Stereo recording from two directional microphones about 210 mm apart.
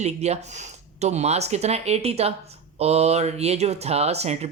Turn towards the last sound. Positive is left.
turn(degrees=-30)  # may be behind; listen again after turning